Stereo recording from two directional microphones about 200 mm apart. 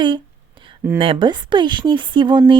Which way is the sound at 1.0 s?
25° right (ahead or behind).